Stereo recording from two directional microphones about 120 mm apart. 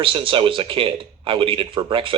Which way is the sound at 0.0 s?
45° right (ahead or behind).